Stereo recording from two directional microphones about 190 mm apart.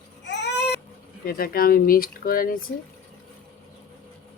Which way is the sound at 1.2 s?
50° left (ahead or behind).